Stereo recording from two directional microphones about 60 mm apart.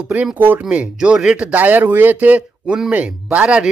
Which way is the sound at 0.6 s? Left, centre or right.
Centre.